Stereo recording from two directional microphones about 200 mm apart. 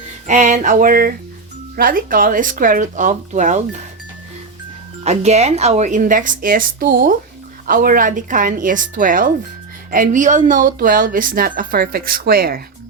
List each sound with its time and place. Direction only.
0.3 s a woman's voice: 40° right (ahead or behind)
5.0 s a woman's voice: 35° right (ahead or behind)